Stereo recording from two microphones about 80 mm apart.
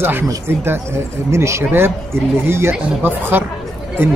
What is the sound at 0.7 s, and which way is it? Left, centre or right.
A man's voice, right.